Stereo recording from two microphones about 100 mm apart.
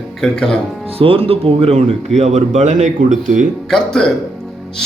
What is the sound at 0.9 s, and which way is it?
Speech, 70° right (ahead or behind).